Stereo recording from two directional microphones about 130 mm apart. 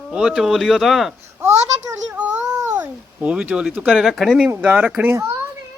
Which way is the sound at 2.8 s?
10° right (ahead or behind).